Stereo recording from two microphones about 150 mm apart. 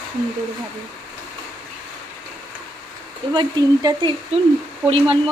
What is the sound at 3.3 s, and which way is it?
Speech, 30° right (ahead or behind).